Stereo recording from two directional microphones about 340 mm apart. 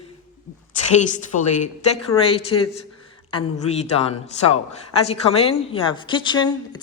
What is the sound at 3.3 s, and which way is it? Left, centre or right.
Speech, centre.